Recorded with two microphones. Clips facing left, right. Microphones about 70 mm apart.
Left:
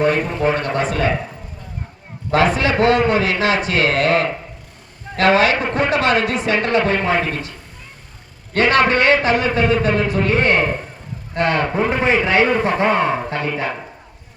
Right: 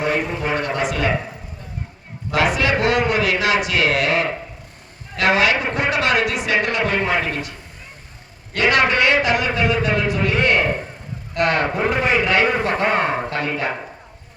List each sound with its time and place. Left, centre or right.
0.0 s a man's voice: left
2.3 s a man's voice: left
8.5 s a man's voice: left
12.9 s speech: centre